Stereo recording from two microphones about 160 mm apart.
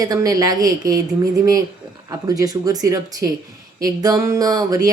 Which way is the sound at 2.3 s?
20° right (ahead or behind).